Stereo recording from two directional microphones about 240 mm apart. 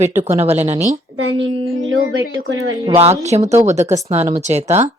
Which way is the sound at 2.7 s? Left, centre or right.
Centre.